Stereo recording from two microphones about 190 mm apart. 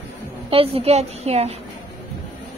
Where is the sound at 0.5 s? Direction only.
30° right (ahead or behind).